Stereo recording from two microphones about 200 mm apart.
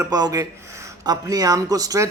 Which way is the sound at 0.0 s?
20° right (ahead or behind).